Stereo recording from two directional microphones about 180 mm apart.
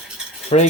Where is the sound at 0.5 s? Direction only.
35° left (ahead or behind).